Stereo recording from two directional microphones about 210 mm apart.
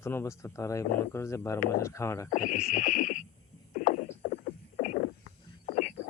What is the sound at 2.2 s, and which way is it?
Horse, 35° left (ahead or behind).